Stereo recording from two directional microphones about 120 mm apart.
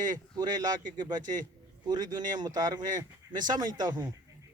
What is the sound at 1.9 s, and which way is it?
Speech, 35° right (ahead or behind).